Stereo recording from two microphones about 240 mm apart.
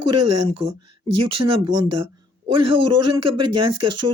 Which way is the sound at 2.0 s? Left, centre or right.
Right.